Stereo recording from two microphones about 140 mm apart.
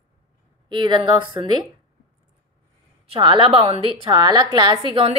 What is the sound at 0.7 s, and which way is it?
Speech, 30° right (ahead or behind).